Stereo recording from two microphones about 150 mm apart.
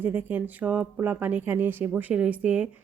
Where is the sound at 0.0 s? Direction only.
10° right (ahead or behind).